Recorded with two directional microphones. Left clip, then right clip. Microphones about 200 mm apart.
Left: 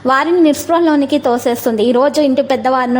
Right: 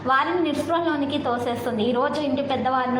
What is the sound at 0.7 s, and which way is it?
A woman's voice, 50° left (ahead or behind).